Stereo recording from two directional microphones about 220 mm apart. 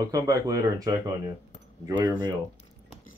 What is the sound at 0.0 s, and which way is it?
Speech, 15° right (ahead or behind).